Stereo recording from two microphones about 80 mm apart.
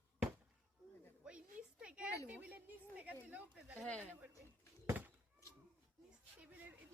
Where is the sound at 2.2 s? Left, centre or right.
Centre.